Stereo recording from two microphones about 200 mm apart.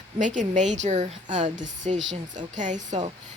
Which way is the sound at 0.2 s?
40° right (ahead or behind).